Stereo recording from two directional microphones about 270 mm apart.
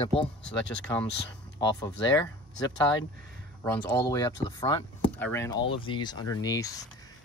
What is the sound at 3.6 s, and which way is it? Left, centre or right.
Speech, centre.